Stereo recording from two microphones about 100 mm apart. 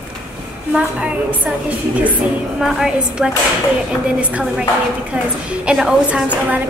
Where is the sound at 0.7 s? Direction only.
10° right (ahead or behind).